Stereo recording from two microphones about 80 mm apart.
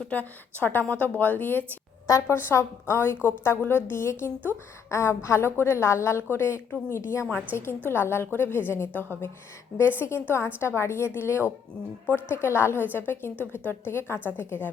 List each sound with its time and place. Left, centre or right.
0.0 s a woman's voice: centre